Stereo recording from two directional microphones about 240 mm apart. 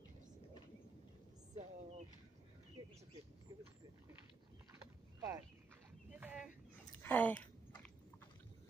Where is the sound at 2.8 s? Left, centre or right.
Centre.